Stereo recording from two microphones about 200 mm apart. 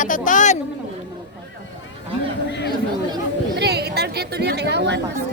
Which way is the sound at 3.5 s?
55° right (ahead or behind).